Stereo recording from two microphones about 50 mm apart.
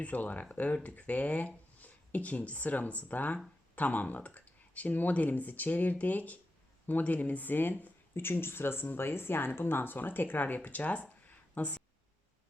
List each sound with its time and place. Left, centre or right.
0.0 s speech: left